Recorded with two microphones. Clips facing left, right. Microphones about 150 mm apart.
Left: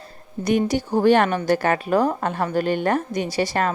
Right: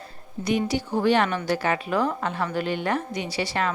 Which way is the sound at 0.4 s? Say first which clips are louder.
Left 4 dB; 50° left (ahead or behind).